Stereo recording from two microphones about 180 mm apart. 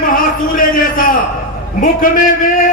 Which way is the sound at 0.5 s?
50° left (ahead or behind).